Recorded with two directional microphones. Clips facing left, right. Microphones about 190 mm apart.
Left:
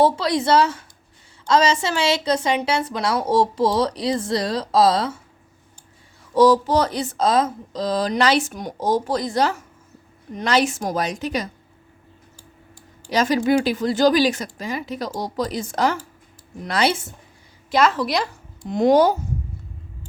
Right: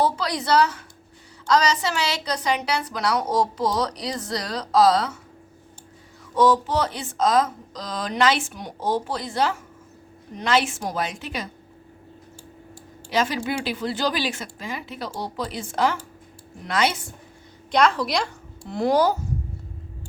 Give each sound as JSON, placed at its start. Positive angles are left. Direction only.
{"t": 0.0, "sound": "a woman's voice", "side_deg": 25}
{"t": 6.3, "sound": "speech", "side_deg": 35}
{"t": 13.1, "sound": "speech", "side_deg": 40}
{"t": 17.7, "sound": "a woman's voice", "side_deg": 5}
{"t": 18.7, "sound": "a woman's voice", "side_deg": 20}